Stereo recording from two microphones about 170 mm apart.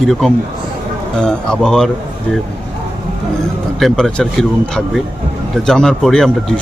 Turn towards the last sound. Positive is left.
turn(degrees=5)  # may be behind; listen again after turning